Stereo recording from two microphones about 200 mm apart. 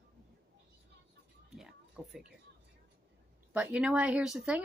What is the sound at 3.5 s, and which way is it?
Speech, 5° right (ahead or behind).